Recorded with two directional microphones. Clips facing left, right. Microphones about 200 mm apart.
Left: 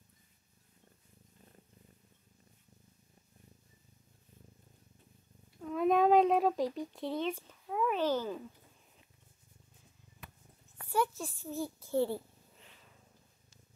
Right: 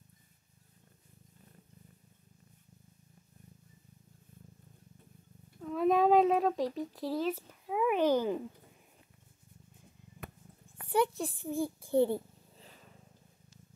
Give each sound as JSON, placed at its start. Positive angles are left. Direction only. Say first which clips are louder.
{"t": 5.6, "sound": "a child's voice", "louder": "right 1 dB", "side_deg": 0}
{"t": 10.9, "sound": "a child's voice", "louder": "right 4 dB", "side_deg": -15}
{"t": 12.5, "sound": "purr", "louder": "right 6 dB", "side_deg": -35}